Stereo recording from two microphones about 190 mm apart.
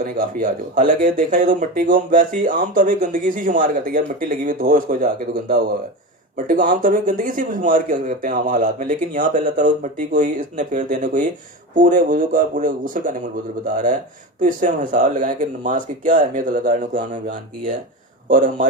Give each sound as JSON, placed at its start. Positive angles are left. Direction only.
{"t": 0.0, "sound": "speech", "side_deg": -45}
{"t": 6.3, "sound": "speech", "side_deg": -45}
{"t": 14.4, "sound": "speech", "side_deg": -45}